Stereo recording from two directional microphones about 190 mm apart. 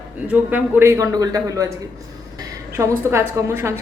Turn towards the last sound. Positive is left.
turn(degrees=-15)  # may be behind; listen again after turning